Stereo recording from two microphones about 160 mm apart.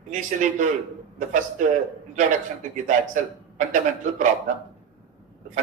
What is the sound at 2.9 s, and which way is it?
Speech, 50° right (ahead or behind).